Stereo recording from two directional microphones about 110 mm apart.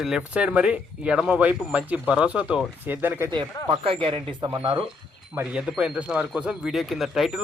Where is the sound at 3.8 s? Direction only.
55° right (ahead or behind).